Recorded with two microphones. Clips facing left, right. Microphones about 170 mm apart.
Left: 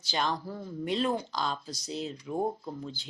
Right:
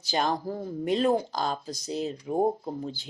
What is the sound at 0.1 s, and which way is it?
Speech, 45° right (ahead or behind).